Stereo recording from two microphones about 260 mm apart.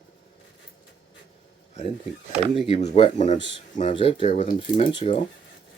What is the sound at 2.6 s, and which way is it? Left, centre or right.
Speech, left.